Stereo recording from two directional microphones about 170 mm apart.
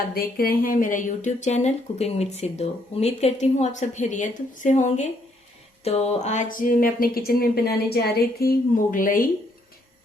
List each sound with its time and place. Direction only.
0.1 s speech: 60° left (ahead or behind)